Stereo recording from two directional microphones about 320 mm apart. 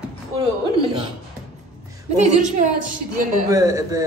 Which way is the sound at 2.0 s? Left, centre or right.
Right.